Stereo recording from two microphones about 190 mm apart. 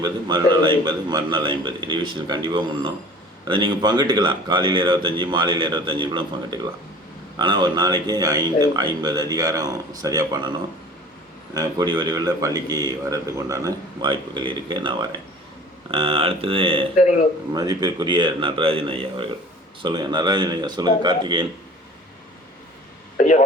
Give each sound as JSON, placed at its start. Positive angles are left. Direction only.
{"t": 0.0, "sound": "a man's voice", "side_deg": -20}
{"t": 11.5, "sound": "a man's voice", "side_deg": -20}
{"t": 16.9, "sound": "a man's voice", "side_deg": 40}
{"t": 17.5, "sound": "a man's voice", "side_deg": -20}
{"t": 23.1, "sound": "a sound", "side_deg": 40}